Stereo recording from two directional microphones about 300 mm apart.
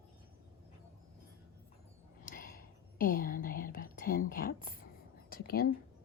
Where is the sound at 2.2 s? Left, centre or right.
Left.